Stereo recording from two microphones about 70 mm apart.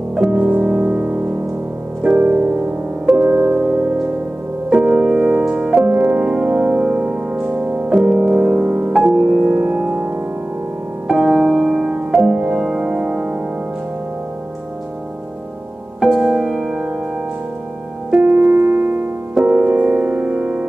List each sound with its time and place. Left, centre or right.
0.1 s music: centre
11.1 s music: centre
16.0 s music: centre
18.2 s music: right
19.3 s music: centre